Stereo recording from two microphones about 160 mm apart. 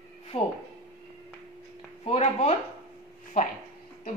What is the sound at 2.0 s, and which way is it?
Speech, 40° left (ahead or behind).